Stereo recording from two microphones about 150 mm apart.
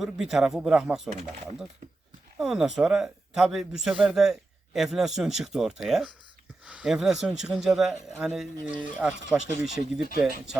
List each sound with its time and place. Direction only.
0.0 s a man's voice: centre (ahead or behind)
2.4 s a man's voice: 5° right (ahead or behind)